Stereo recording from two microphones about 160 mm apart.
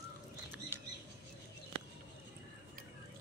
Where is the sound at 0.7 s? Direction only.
15° right (ahead or behind).